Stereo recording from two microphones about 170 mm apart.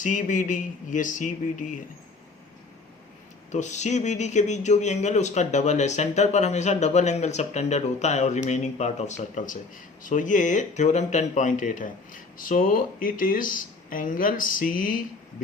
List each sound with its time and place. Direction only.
0.0 s speech: 50° left (ahead or behind)
3.5 s speech: 45° left (ahead or behind)